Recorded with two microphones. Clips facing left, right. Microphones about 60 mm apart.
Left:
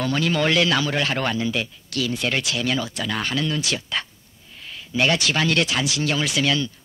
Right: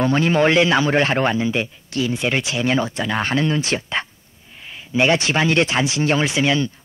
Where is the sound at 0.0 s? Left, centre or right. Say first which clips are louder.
Right 5 dB; right.